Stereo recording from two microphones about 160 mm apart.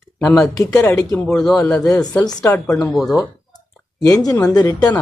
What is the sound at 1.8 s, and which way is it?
Speech, 20° left (ahead or behind).